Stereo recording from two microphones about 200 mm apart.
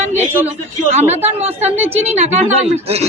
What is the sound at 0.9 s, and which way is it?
Speech, 30° right (ahead or behind).